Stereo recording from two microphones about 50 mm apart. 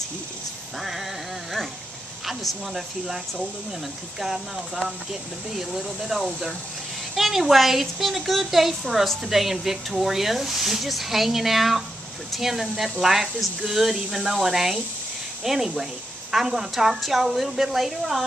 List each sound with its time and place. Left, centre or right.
0.7 s a woman's voice: centre
2.2 s a woman's voice: centre
5.5 s a woman's voice: centre